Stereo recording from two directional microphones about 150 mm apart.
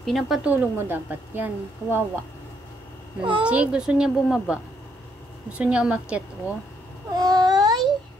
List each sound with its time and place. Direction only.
0.0 s a woman's voice: centre (ahead or behind)
3.2 s a woman's voice: 35° right (ahead or behind)
3.4 s a woman's voice: 10° right (ahead or behind)
7.2 s a sound: 25° right (ahead or behind)